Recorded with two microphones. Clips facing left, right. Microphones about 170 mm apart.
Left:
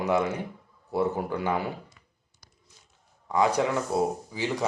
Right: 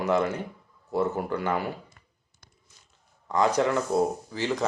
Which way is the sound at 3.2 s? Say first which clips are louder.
Right 1 dB; 10° left (ahead or behind).